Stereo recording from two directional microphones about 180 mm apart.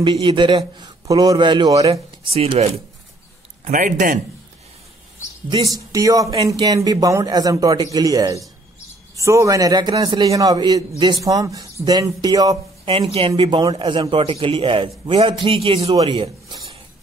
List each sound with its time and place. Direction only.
0.0 s a man's voice: 25° right (ahead or behind)
1.9 s a man's voice: 35° right (ahead or behind)
5.9 s a man's voice: 20° right (ahead or behind)